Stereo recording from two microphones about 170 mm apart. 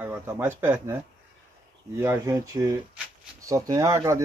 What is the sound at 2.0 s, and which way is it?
Speech, 15° right (ahead or behind).